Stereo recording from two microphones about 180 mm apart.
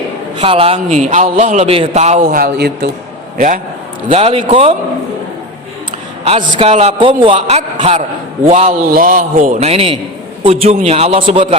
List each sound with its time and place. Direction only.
0.3 s a man's voice: 30° right (ahead or behind); by 2.9 s 65° right (ahead or behind)
3.3 s a man's voice: 45° right (ahead or behind)
4.1 s a man's voice: 35° right (ahead or behind)
6.2 s a man's voice: 35° right (ahead or behind)
7.3 s a man's voice: 40° right (ahead or behind)
8.9 s a man's voice: 50° right (ahead or behind); by 11.4 s 35° right (ahead or behind)